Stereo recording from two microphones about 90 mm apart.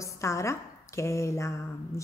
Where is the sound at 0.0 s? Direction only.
35° left (ahead or behind).